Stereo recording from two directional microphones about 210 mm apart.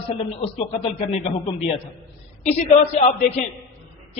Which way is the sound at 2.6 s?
30° left (ahead or behind).